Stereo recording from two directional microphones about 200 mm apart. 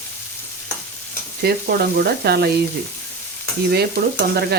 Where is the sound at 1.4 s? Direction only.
50° right (ahead or behind).